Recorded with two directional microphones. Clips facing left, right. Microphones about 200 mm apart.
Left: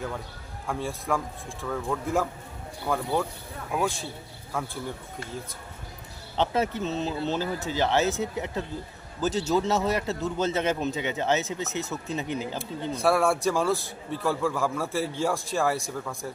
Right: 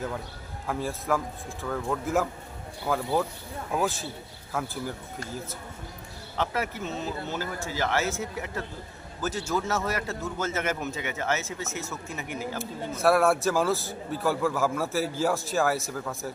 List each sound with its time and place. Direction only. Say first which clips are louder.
0.7 s a man's voice: right 1 dB; centre (ahead or behind)
6.3 s a man's voice: left 4 dB; 20° left (ahead or behind)
13.0 s a man's voice: right 2 dB; centre (ahead or behind)